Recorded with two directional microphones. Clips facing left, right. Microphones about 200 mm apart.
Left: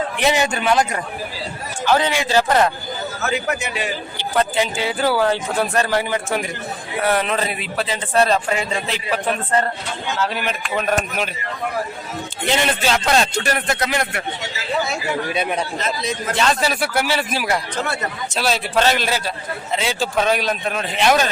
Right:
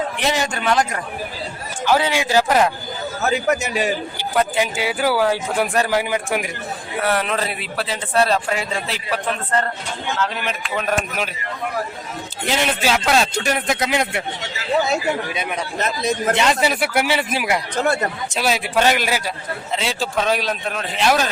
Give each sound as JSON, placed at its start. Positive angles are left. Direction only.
{"t": 0.2, "sound": "speech", "side_deg": 0}
{"t": 1.8, "sound": "speech", "side_deg": -10}
{"t": 3.2, "sound": "a man's voice", "side_deg": -40}
{"t": 4.2, "sound": "speech", "side_deg": -10}
{"t": 7.0, "sound": "speech", "side_deg": 0}
{"t": 9.0, "sound": "a man's voice", "side_deg": 15}
{"t": 12.5, "sound": "speech", "side_deg": -5}
{"t": 13.4, "sound": "speech", "side_deg": -15}
{"t": 15.4, "sound": "speech", "side_deg": 35}
{"t": 16.3, "sound": "speech", "side_deg": -20}
{"t": 19.7, "sound": "speech", "side_deg": 0}